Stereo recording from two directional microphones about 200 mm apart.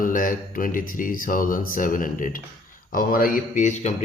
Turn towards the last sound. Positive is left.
turn(degrees=35)  # may be behind; listen again after turning